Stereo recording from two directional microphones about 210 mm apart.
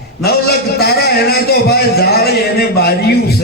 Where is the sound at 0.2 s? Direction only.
50° left (ahead or behind).